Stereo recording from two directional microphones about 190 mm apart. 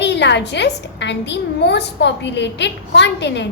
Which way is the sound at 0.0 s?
65° left (ahead or behind).